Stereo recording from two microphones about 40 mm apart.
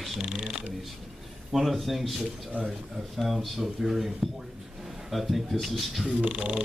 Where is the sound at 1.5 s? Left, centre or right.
Centre.